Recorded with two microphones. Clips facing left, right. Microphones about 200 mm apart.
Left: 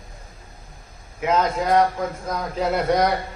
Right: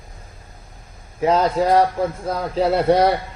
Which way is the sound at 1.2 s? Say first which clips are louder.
Right 4 dB; 35° right (ahead or behind).